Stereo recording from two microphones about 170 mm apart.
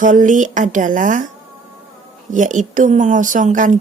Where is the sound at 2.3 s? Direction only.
50° right (ahead or behind).